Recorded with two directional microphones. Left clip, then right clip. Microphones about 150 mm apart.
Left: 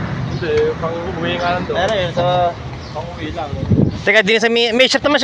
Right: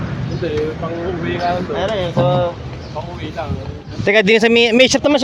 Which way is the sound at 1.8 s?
15° right (ahead or behind).